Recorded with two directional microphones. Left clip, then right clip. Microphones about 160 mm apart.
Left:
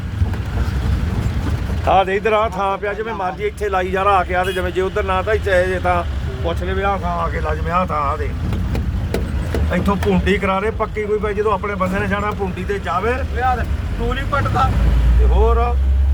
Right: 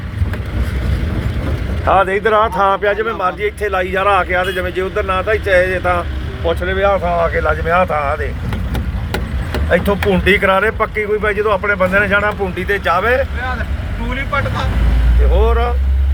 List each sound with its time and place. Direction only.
1.9 s speech: 25° left (ahead or behind)
2.4 s speech: 5° left (ahead or behind)
3.1 s speech: 15° left (ahead or behind)
3.7 s speech: 30° left (ahead or behind)
6.7 s speech: 5° left (ahead or behind)
9.7 s speech: centre (ahead or behind)
15.4 s speech: 5° left (ahead or behind)